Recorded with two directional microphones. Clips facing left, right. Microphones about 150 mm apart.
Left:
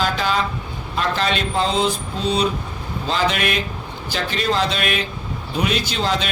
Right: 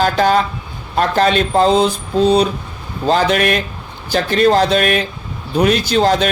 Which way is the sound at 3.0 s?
45° right (ahead or behind).